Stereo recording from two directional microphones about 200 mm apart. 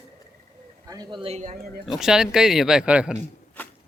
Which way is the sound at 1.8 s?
Centre (ahead or behind).